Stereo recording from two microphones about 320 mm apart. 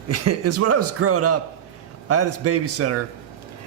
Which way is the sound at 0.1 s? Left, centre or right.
Right.